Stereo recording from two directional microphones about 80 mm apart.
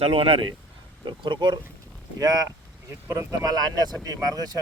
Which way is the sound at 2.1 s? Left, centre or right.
Right.